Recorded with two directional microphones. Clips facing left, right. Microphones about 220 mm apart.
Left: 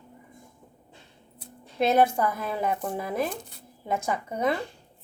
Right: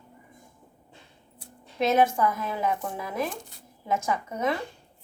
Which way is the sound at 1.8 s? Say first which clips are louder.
Left 1 dB; 35° left (ahead or behind).